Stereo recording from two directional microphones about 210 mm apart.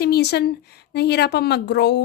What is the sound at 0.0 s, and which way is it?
Speech, 50° left (ahead or behind).